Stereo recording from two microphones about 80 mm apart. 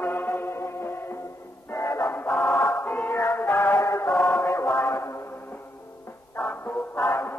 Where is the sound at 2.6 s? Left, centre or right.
Left.